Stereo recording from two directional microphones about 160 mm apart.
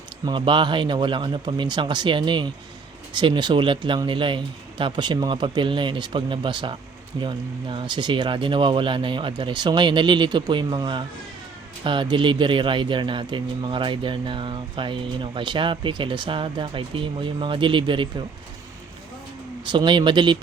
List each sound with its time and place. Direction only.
0.3 s speech: 30° right (ahead or behind)
19.6 s speech: 30° right (ahead or behind)